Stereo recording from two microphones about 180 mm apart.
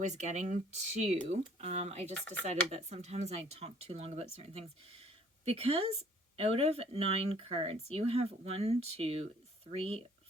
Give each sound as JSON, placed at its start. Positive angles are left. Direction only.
{"t": 0.0, "sound": "speech", "side_deg": -40}
{"t": 2.1, "sound": "speech", "side_deg": 10}
{"t": 2.5, "sound": "speech", "side_deg": -40}